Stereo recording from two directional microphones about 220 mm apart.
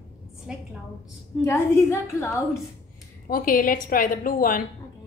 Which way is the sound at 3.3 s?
40° left (ahead or behind).